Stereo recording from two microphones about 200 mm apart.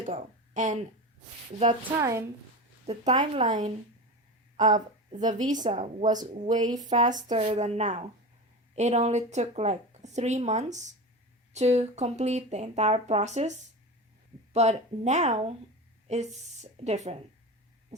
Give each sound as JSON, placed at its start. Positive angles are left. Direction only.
{"t": 0.0, "sound": "speech", "side_deg": -40}
{"t": 1.8, "sound": "a woman's voice", "side_deg": -15}
{"t": 2.8, "sound": "a woman's voice", "side_deg": -35}